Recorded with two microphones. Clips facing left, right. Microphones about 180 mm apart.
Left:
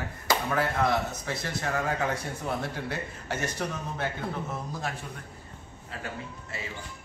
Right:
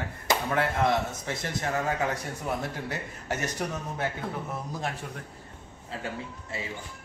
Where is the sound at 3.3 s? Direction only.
15° right (ahead or behind).